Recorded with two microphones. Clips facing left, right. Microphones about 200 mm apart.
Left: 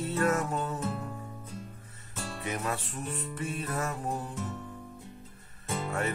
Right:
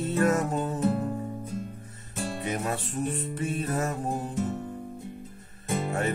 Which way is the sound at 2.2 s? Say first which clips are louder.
Right 5 dB; 30° right (ahead or behind).